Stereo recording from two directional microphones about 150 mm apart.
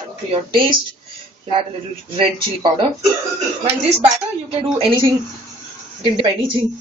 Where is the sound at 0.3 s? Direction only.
35° right (ahead or behind).